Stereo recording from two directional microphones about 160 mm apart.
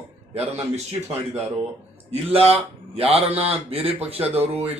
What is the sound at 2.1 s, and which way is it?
A man's voice, 40° right (ahead or behind).